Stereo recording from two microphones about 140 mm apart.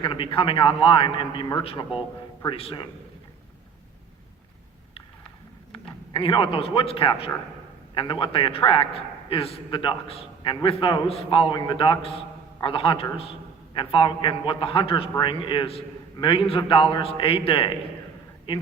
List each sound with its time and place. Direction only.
0.0 s a man's voice: 35° left (ahead or behind)
6.1 s a man's voice: 35° left (ahead or behind)